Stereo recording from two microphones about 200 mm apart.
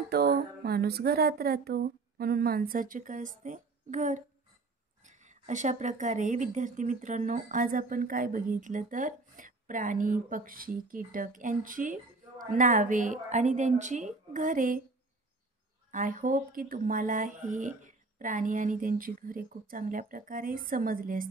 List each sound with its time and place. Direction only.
0.1 s speech: 50° right (ahead or behind)
15.9 s speech: 40° right (ahead or behind)